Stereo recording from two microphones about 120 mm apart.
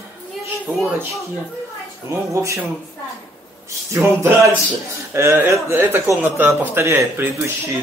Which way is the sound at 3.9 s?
20° right (ahead or behind).